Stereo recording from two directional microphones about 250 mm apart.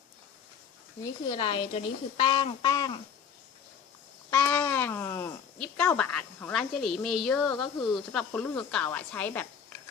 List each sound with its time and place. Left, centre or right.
1.3 s speech: left
4.3 s a sound: centre
8.1 s speech: centre